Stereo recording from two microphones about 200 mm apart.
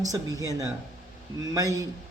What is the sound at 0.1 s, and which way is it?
A man's voice, 20° right (ahead or behind).